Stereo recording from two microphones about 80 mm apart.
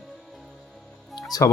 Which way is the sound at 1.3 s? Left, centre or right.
Left.